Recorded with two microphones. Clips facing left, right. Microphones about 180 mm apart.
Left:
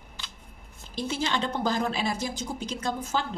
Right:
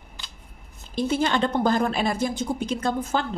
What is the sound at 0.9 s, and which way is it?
A woman's voice, 55° right (ahead or behind).